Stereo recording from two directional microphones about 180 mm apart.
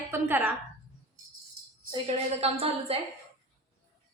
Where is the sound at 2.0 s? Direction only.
35° right (ahead or behind).